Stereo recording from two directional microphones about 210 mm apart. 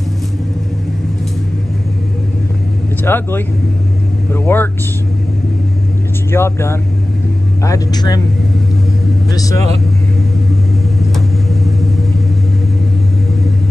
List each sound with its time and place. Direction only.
3.0 s speech: 10° left (ahead or behind)
6.3 s speech: 10° left (ahead or behind)
9.3 s speech: 15° left (ahead or behind)